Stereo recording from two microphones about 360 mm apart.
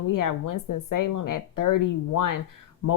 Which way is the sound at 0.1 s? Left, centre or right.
Left.